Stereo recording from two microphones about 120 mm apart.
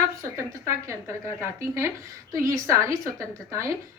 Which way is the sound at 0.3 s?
25° right (ahead or behind).